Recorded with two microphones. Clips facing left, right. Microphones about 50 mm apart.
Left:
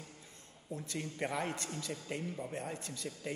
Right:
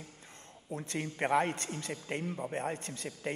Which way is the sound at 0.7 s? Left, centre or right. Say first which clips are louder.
Right 4 dB; right.